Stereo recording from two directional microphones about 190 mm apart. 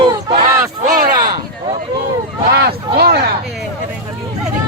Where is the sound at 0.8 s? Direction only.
40° right (ahead or behind).